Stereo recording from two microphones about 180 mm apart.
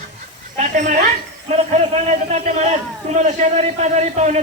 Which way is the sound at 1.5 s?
40° right (ahead or behind).